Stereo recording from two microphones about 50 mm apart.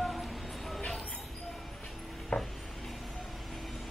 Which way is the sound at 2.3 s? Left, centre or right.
Left.